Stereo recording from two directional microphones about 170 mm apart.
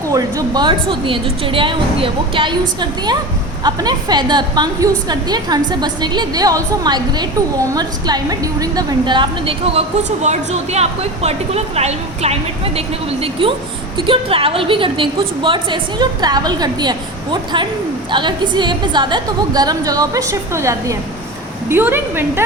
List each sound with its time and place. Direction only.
0.1 s a woman's voice: 20° right (ahead or behind)
3.6 s a woman's voice: 25° right (ahead or behind)